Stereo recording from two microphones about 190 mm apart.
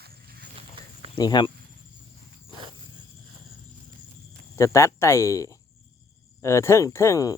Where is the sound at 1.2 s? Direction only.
20° left (ahead or behind).